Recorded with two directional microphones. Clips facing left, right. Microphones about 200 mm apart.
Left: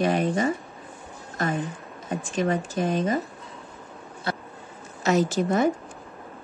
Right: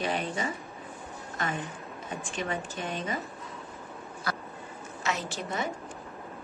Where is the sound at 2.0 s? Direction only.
40° left (ahead or behind).